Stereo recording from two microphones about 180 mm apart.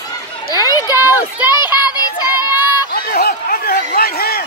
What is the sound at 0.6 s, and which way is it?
Children playing, 20° left (ahead or behind).